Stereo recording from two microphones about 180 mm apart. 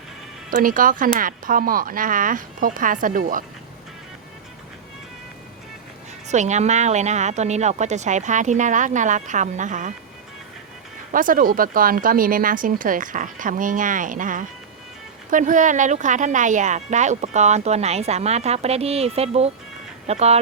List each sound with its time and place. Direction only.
0.5 s speech: 50° right (ahead or behind)
6.2 s speech: 40° right (ahead or behind)
11.1 s speech: 50° right (ahead or behind)